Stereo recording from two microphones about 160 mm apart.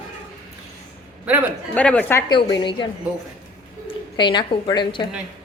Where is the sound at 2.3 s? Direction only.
30° left (ahead or behind).